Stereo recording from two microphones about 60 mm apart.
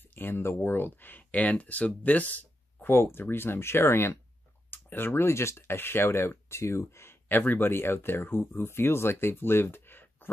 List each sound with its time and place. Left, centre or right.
0.1 s speech: left
2.9 s speech: left
7.2 s speech: left